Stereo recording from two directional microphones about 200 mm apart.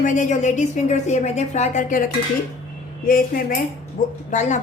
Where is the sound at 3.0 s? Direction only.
45° left (ahead or behind).